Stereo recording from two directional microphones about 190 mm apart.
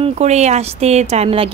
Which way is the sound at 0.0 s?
35° right (ahead or behind).